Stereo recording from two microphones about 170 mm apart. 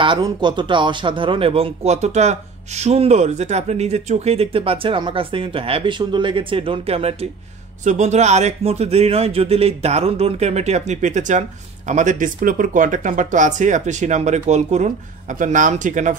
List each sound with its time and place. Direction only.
0.0 s speech: 30° right (ahead or behind); by 16.2 s 45° right (ahead or behind)